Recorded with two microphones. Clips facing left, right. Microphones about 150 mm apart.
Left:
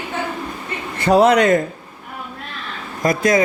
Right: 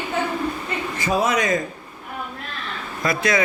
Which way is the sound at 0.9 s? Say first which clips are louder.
Left 9 dB; 65° left (ahead or behind).